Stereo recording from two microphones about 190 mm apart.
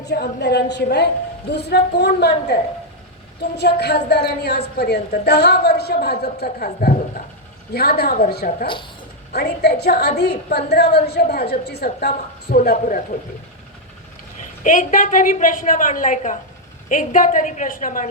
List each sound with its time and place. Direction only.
0.0 s a woman's voice: 60° left (ahead or behind)
8.6 s speech: 25° left (ahead or behind)
9.3 s a woman's voice: 60° left (ahead or behind)
14.6 s a woman's voice: 40° left (ahead or behind)